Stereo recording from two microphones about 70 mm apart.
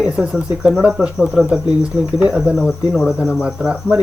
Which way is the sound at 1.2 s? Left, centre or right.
Left.